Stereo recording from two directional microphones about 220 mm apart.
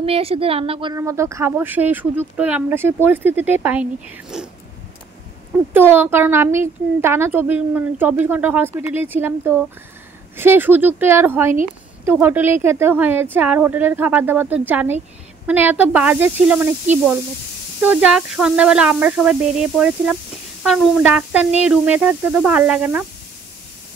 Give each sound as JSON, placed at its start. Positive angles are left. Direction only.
{"t": 0.0, "sound": "a woman's voice", "side_deg": -25}
{"t": 5.7, "sound": "a woman's voice", "side_deg": -10}
{"t": 17.8, "sound": "a woman's voice", "side_deg": -5}